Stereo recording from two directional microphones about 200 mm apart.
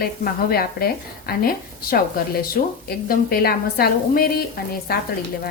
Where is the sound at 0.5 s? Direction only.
50° left (ahead or behind).